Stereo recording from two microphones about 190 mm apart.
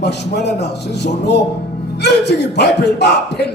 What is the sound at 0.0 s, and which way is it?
A man's voice, 60° left (ahead or behind).